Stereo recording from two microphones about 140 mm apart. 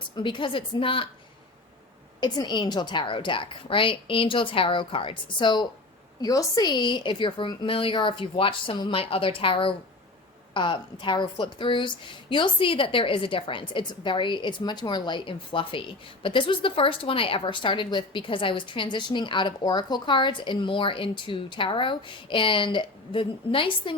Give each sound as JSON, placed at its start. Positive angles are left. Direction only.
{"t": 0.2, "sound": "a woman's voice", "side_deg": 35}
{"t": 2.2, "sound": "a woman's voice", "side_deg": 30}